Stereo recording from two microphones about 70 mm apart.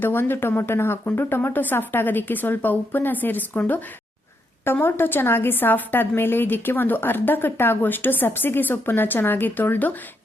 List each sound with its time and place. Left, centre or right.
0.0 s a woman's voice: left